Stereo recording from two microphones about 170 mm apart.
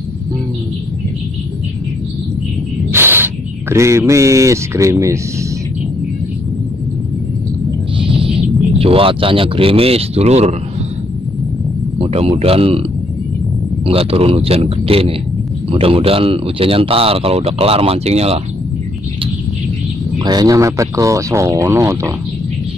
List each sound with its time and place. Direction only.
2.9 s speech: 15° right (ahead or behind)
8.0 s a sound: 30° right (ahead or behind)
8.7 s speech: 35° right (ahead or behind)
12.0 s speech: 35° right (ahead or behind)
13.8 s speech: 35° right (ahead or behind)
20.2 s speech: 25° right (ahead or behind)